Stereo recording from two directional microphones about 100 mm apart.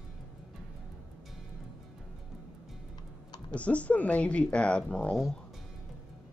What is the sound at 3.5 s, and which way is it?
Speech, 15° left (ahead or behind).